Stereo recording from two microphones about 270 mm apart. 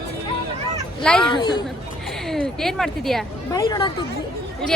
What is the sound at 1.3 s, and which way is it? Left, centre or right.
Speech, centre.